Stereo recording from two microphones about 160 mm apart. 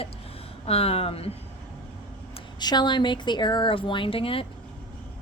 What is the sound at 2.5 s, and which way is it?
A woman's voice, 25° left (ahead or behind).